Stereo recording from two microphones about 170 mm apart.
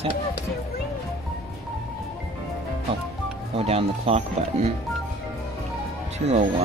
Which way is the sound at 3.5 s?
35° right (ahead or behind).